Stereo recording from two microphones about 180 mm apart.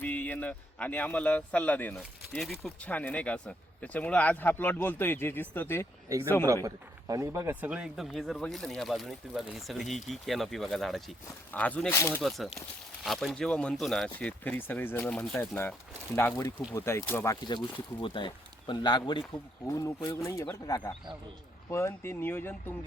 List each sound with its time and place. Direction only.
0.0 s speech: 10° left (ahead or behind)
6.7 s speech: 20° right (ahead or behind); by 12.2 s 10° left (ahead or behind)
12.5 s speech: centre (ahead or behind)
16.7 s speech: 15° left (ahead or behind)
18.0 s speech: 25° left (ahead or behind); by 22.7 s 10° left (ahead or behind)